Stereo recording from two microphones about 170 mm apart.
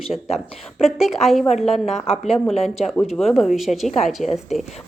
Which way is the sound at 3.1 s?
Centre (ahead or behind).